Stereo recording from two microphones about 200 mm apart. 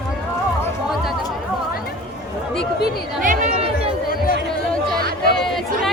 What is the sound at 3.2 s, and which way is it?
Chatter, 40° right (ahead or behind).